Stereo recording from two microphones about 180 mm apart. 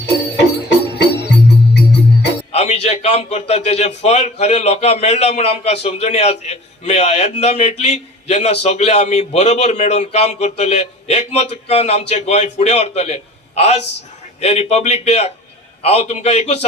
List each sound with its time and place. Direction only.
0.3 s music: 75° left (ahead or behind)
2.5 s a man's voice: 35° left (ahead or behind)